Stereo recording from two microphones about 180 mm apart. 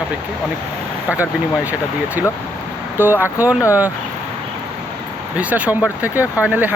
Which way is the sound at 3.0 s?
10° right (ahead or behind).